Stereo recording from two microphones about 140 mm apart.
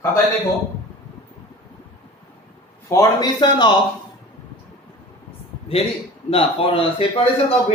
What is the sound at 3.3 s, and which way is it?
Speech, 35° left (ahead or behind).